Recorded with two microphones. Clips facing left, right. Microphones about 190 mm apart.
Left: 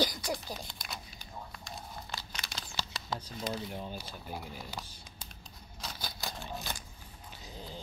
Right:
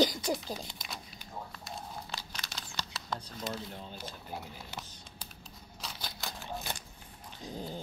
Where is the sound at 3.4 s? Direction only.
Centre (ahead or behind).